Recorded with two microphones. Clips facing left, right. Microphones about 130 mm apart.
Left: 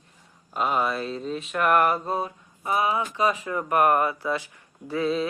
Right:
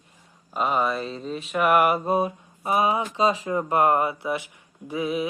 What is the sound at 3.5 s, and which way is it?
Speech, 25° right (ahead or behind).